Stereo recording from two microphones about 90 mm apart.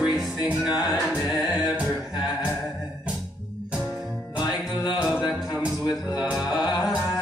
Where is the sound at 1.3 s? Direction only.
50° left (ahead or behind).